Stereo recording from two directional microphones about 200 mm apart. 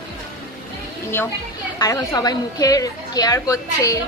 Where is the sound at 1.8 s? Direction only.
20° left (ahead or behind).